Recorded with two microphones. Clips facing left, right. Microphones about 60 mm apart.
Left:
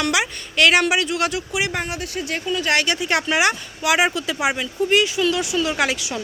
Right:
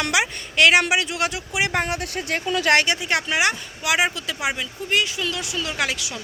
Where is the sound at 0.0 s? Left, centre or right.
Right.